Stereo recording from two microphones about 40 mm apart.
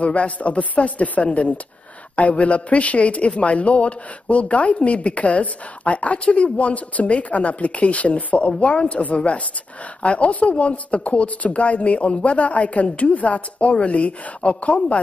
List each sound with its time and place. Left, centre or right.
0.0 s a man's voice: left